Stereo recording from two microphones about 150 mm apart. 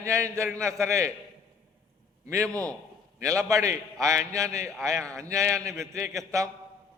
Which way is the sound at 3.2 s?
20° right (ahead or behind).